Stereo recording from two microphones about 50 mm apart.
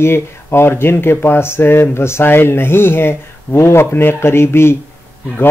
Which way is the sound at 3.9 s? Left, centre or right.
Left.